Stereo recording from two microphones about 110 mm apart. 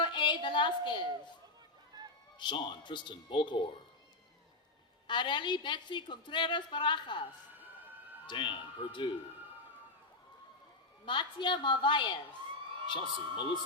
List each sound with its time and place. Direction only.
0.0 s a woman's voice: 45° left (ahead or behind)
2.4 s a woman's voice: 45° left (ahead or behind)
5.0 s a woman's voice: 45° left (ahead or behind)
8.3 s a woman's voice: 50° left (ahead or behind)
11.0 s a woman's voice: 45° left (ahead or behind)